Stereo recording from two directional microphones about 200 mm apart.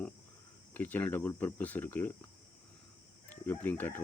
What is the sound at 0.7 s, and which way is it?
Speech, 10° left (ahead or behind).